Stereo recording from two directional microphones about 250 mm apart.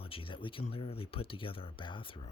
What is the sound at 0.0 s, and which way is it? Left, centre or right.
Speech, left.